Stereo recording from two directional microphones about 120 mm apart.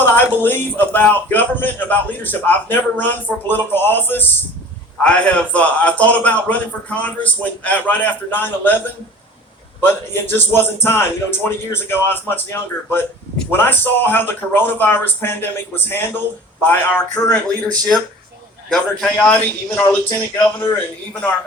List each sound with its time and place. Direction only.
0.0 s a man's voice: 15° left (ahead or behind)
9.8 s a man's voice: 20° left (ahead or behind)
18.7 s a man's voice: 5° left (ahead or behind)